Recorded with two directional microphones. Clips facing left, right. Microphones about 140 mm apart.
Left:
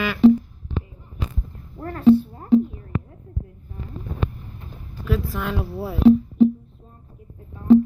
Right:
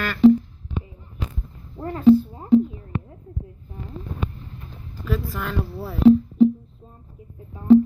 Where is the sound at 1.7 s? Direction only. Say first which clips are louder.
Even; 15° right (ahead or behind).